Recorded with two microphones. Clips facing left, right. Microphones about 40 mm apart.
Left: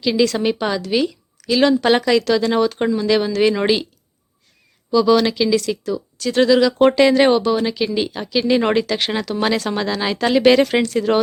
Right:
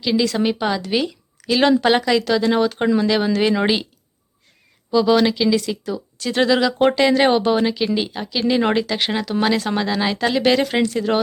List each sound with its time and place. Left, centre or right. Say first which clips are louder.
0.0 s speech: left 2 dB; centre
4.9 s speech: left 1 dB; centre